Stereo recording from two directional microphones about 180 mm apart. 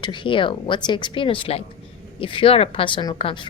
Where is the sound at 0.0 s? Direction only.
25° left (ahead or behind).